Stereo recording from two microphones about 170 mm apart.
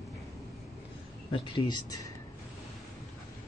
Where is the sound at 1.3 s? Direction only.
30° left (ahead or behind).